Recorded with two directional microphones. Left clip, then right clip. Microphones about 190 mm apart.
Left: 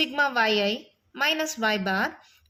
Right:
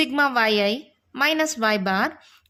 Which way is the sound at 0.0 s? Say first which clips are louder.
Right 3 dB; 35° right (ahead or behind).